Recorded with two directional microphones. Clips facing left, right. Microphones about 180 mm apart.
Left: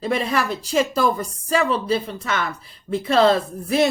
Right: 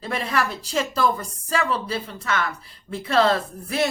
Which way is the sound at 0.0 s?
20° left (ahead or behind).